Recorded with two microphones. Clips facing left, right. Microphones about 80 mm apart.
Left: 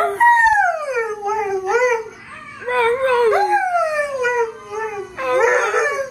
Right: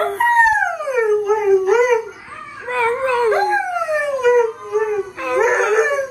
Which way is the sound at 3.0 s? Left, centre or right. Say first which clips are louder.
Even; centre.